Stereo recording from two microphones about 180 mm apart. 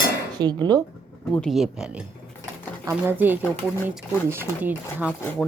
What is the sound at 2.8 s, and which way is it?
Speech, 10° right (ahead or behind).